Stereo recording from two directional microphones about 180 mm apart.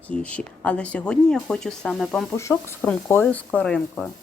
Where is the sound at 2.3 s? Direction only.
15° left (ahead or behind).